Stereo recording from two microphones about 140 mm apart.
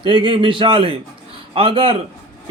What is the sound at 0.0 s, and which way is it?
A man's voice, 35° right (ahead or behind).